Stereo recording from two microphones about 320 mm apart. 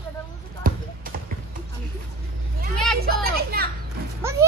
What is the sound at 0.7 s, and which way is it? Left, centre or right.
Basketball bounce, right.